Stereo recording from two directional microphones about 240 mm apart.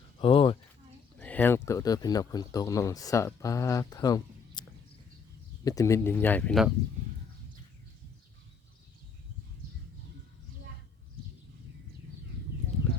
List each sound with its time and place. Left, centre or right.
0.2 s a sound: left
1.2 s speech: centre
5.6 s speech: centre